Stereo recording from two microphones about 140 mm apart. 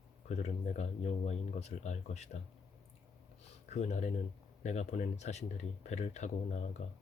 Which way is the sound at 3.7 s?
55° left (ahead or behind).